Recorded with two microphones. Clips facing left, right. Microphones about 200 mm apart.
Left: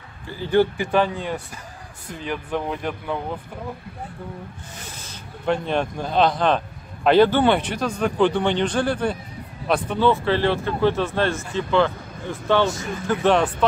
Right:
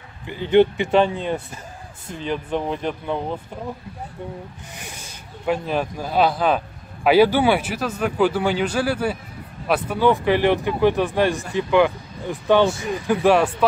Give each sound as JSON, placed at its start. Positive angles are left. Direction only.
{"t": 0.3, "sound": "a man's voice", "side_deg": -20}
{"t": 5.4, "sound": "a man's voice", "side_deg": -5}